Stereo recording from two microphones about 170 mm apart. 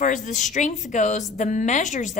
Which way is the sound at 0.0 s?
50° left (ahead or behind).